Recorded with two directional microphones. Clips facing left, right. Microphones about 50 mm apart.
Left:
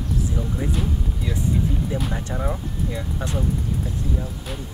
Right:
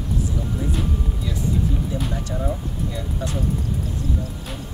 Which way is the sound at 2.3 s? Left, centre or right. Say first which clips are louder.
Right 1 dB; left.